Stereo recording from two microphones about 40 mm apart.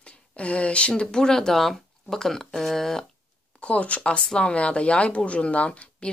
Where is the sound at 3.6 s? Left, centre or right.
Left.